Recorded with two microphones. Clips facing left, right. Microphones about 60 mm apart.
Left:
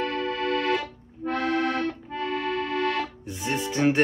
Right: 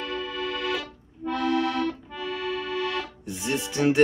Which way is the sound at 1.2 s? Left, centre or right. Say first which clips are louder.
Even; left.